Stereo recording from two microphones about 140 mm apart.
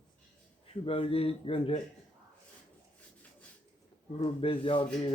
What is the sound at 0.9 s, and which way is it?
Speech, 40° left (ahead or behind).